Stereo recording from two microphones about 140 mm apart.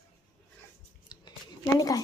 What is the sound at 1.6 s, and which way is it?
Speech, 25° left (ahead or behind).